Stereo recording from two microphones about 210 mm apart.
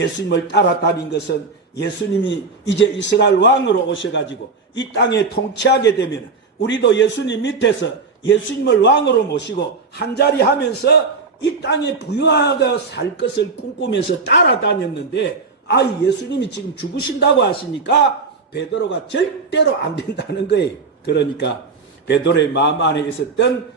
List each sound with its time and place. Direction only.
0.5 s a man's voice: 55° left (ahead or behind)